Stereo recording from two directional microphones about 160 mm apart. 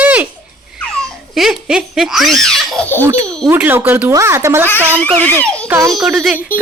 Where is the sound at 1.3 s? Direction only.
5° right (ahead or behind).